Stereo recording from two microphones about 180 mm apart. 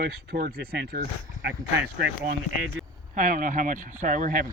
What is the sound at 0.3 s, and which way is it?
Speech, 60° right (ahead or behind).